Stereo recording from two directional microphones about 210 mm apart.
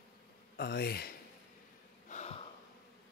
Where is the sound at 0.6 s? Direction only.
50° left (ahead or behind).